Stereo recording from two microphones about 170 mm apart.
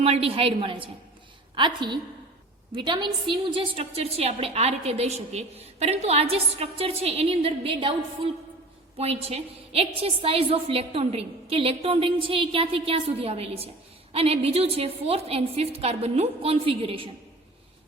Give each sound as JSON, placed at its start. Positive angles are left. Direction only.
{"t": 0.0, "sound": "a woman's voice", "side_deg": -35}